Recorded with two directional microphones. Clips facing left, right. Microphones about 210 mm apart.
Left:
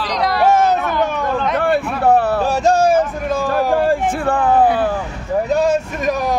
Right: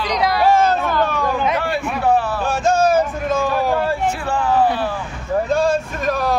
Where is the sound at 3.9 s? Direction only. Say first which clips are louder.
Left 4 dB; 55° left (ahead or behind).